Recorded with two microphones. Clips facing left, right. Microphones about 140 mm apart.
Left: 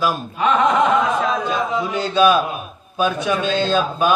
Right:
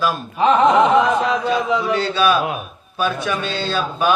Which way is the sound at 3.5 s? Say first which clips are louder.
Left 5 dB; 45° left (ahead or behind).